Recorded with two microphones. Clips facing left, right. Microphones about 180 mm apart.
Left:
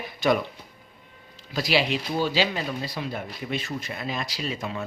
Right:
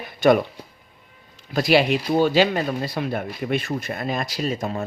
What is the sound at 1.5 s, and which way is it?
Speech, 55° right (ahead or behind).